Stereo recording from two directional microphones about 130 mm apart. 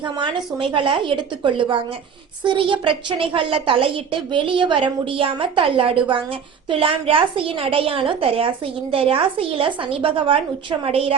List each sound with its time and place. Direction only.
0.0 s a woman's voice: 40° right (ahead or behind)